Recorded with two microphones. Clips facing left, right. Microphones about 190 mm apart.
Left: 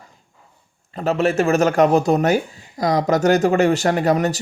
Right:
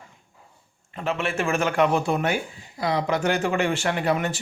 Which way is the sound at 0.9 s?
40° left (ahead or behind).